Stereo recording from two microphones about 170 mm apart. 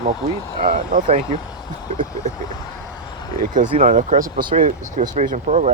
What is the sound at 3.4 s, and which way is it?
Speech, 50° right (ahead or behind).